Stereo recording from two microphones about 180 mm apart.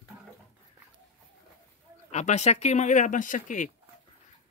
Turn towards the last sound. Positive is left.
turn(degrees=45)  # may be behind; listen again after turning